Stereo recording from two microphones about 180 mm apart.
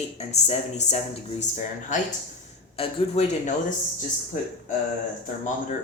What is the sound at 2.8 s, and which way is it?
Speech, 35° left (ahead or behind).